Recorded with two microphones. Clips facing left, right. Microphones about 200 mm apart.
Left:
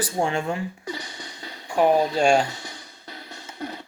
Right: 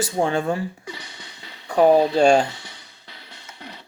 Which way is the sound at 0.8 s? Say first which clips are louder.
Left 4 dB; 40° left (ahead or behind).